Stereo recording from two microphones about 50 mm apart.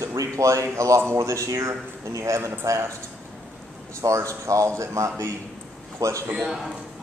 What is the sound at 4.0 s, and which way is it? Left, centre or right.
A man's voice, right.